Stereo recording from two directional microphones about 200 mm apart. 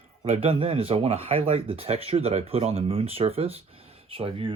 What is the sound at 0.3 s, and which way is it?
Speech, 30° right (ahead or behind).